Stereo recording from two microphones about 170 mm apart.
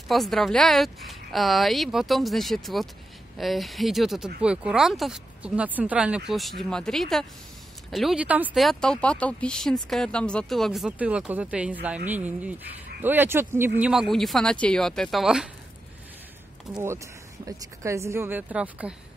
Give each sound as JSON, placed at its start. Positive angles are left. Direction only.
{"t": 0.1, "sound": "speech", "side_deg": 0}
{"t": 16.8, "sound": "speech", "side_deg": -15}